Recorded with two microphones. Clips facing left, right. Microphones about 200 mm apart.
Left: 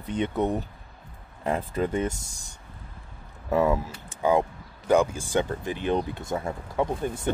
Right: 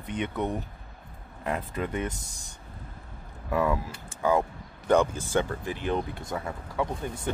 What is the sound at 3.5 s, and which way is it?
Speech, 25° left (ahead or behind).